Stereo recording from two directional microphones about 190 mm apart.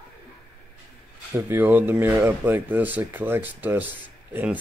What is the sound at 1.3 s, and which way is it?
Speech, 10° right (ahead or behind).